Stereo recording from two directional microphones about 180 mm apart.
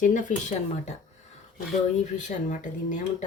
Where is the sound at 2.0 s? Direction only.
45° left (ahead or behind).